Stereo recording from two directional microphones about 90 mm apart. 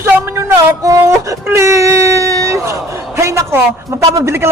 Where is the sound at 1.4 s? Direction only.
30° right (ahead or behind).